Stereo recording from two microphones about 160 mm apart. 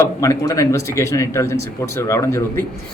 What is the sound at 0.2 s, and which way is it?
A man's voice, 20° left (ahead or behind).